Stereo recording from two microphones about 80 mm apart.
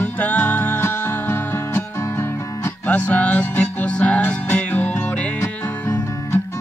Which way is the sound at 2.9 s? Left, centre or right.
Centre.